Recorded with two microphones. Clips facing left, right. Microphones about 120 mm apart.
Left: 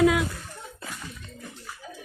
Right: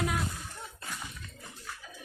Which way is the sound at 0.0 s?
90° left.